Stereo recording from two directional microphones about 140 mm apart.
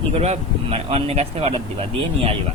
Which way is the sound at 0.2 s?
45° right (ahead or behind).